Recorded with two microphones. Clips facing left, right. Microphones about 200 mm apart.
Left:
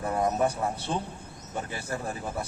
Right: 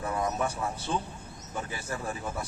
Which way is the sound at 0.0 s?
35° left (ahead or behind).